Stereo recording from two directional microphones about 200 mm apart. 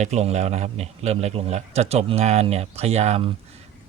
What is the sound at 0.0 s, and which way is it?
A man's voice, 35° right (ahead or behind).